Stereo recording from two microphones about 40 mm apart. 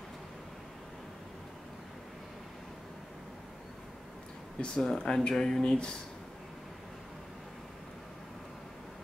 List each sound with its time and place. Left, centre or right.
4.7 s speech: centre